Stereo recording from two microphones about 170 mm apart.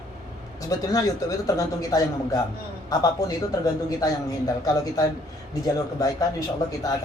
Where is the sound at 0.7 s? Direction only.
20° left (ahead or behind).